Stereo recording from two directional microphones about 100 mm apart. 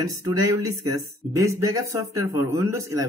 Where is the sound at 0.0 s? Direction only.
35° right (ahead or behind).